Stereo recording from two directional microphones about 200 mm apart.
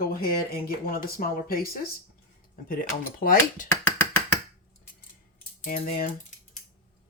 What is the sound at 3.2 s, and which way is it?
Speech, 45° left (ahead or behind).